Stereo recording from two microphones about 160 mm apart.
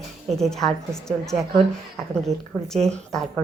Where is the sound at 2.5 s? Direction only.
Centre (ahead or behind).